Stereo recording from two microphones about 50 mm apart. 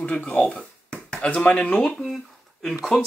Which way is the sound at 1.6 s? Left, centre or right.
Left.